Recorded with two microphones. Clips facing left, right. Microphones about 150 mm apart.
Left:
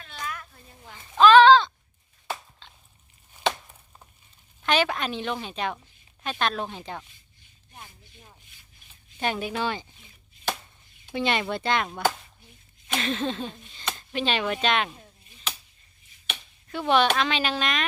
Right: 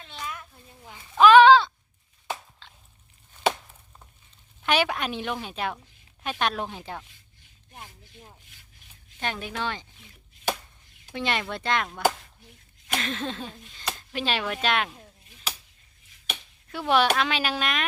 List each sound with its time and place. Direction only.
0.0 s a sound: 20° right (ahead or behind)
4.6 s a woman's voice: 10° right (ahead or behind)
9.2 s a woman's voice: 10° left (ahead or behind)
11.1 s speech: centre (ahead or behind)
12.9 s a sound: centre (ahead or behind)
13.7 s speech: 5° right (ahead or behind)
16.3 s speech: centre (ahead or behind)